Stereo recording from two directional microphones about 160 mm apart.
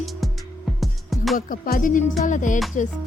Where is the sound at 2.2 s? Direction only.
50° left (ahead or behind).